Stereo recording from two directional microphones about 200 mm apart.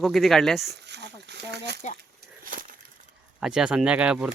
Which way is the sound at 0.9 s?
60° right (ahead or behind).